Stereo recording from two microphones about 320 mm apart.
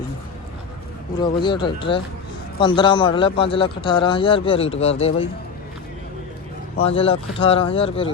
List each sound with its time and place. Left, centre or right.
1.2 s speech: centre
6.8 s speech: centre